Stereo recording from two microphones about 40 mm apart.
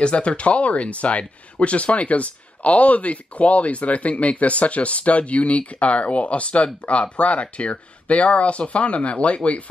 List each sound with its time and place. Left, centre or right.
0.0 s speech: left